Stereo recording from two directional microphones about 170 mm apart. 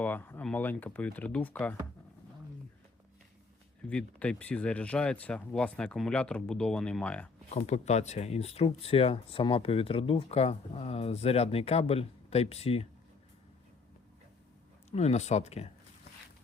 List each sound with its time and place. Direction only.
0.0 s speech: 10° left (ahead or behind)
3.8 s speech: 5° left (ahead or behind)
7.5 s speech: 40° left (ahead or behind)
14.8 s speech: 40° left (ahead or behind)